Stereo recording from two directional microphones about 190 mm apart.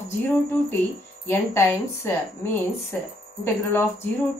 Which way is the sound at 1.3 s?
15° left (ahead or behind).